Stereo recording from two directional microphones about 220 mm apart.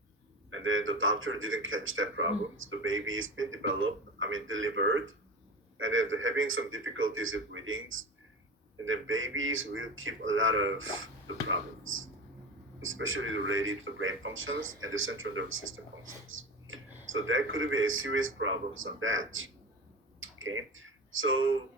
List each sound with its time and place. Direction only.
0.5 s speech: 65° right (ahead or behind)
12.8 s speech: 65° right (ahead or behind)
20.1 s a sound: 65° right (ahead or behind)